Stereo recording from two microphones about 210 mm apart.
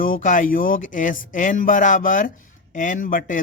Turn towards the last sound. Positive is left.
turn(degrees=40)  # may be behind; listen again after turning